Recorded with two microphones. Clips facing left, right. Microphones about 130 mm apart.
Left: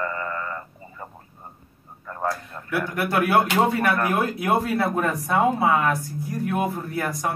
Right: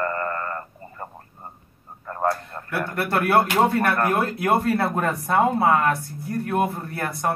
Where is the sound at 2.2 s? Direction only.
55° right (ahead or behind).